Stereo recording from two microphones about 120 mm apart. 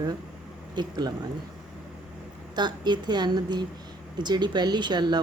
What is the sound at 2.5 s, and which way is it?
Speech, 40° right (ahead or behind).